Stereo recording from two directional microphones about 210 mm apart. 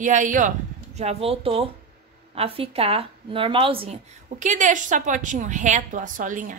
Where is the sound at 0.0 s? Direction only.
35° right (ahead or behind).